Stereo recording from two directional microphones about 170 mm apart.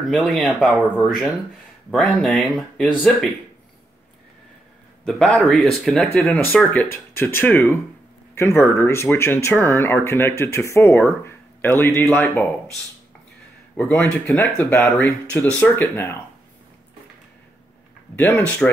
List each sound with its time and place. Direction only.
0.0 s speech: centre (ahead or behind)
5.0 s speech: centre (ahead or behind)
13.7 s speech: 10° left (ahead or behind)
18.3 s speech: 5° left (ahead or behind)